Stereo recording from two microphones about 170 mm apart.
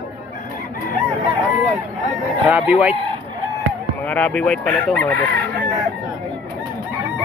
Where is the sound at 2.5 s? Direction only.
10° right (ahead or behind).